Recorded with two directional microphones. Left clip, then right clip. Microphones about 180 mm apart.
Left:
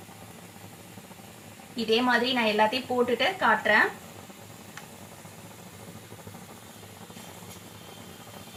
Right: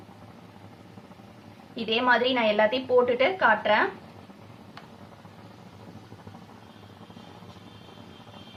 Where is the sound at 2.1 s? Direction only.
25° right (ahead or behind).